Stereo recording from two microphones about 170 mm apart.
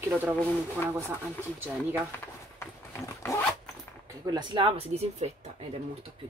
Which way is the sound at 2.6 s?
15° left (ahead or behind).